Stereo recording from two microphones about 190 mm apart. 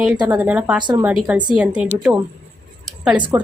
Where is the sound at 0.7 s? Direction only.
25° right (ahead or behind).